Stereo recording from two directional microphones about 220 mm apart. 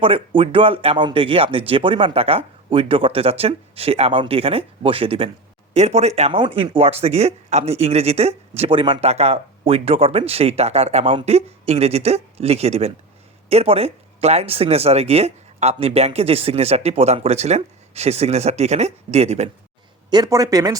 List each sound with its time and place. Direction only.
0.0 s speech: 25° right (ahead or behind)
20.1 s speech: 15° right (ahead or behind)